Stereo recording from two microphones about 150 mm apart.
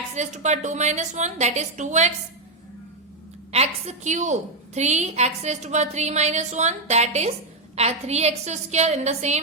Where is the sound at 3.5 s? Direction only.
45° right (ahead or behind).